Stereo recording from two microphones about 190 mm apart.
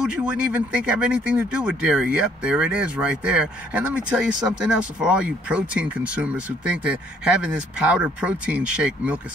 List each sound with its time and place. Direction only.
0.0 s speech: 5° right (ahead or behind)